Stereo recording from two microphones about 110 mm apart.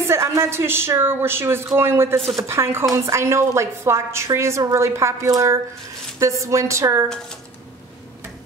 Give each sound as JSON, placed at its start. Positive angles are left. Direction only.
{"t": 0.0, "sound": "speech", "side_deg": -25}